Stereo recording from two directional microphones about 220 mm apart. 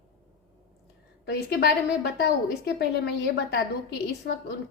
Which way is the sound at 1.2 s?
50° left (ahead or behind).